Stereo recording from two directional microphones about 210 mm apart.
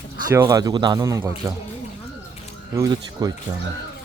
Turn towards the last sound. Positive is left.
turn(degrees=-15)  # may be behind; listen again after turning